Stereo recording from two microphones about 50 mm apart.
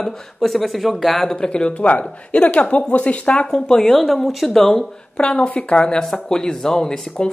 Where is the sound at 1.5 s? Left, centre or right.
Left.